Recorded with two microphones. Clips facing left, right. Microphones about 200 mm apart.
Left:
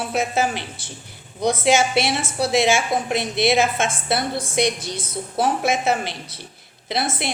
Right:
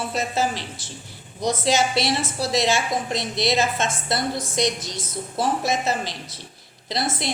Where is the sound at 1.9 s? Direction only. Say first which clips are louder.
Left 2 dB; 55° left (ahead or behind).